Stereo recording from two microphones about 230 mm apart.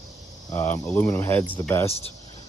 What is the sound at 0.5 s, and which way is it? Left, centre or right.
Speech, centre.